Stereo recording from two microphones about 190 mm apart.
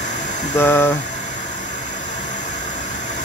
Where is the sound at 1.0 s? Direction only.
40° left (ahead or behind).